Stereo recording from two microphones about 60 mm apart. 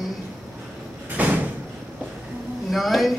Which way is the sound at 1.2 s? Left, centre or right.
Right.